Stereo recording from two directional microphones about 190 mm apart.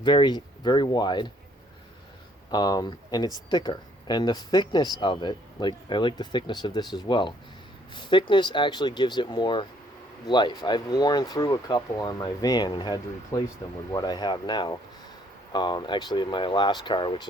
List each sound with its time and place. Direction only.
0.0 s speech: 25° left (ahead or behind)
2.5 s speech: 20° left (ahead or behind)